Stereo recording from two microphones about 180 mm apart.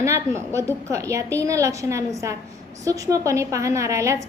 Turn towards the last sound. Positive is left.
turn(degrees=-15)  # may be behind; listen again after turning